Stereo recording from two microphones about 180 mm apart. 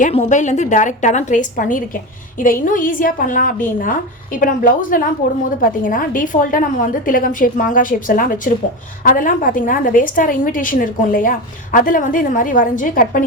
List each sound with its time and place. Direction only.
0.0 s a woman's voice: 40° left (ahead or behind)